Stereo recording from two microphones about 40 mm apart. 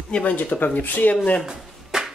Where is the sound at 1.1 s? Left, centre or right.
Left.